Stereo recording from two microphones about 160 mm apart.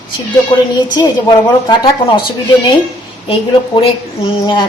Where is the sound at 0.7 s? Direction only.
25° left (ahead or behind).